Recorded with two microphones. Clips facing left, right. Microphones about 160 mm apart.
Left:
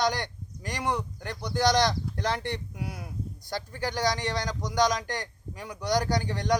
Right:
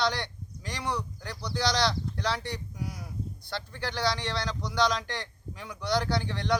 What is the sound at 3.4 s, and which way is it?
A man's voice, 45° left (ahead or behind).